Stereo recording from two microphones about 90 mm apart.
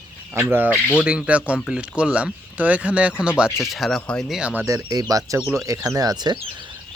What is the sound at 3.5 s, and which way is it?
Speech, centre (ahead or behind).